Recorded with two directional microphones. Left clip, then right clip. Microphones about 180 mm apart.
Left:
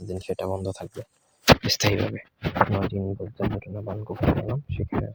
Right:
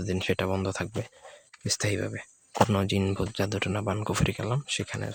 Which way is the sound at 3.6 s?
30° right (ahead or behind).